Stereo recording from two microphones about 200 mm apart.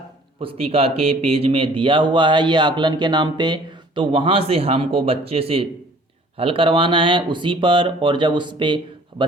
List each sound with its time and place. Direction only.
0.3 s speech: 30° right (ahead or behind)